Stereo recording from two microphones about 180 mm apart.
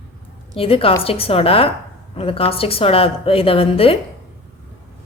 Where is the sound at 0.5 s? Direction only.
30° left (ahead or behind).